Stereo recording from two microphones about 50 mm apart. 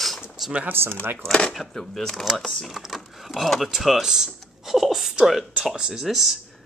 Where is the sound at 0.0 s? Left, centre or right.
Centre.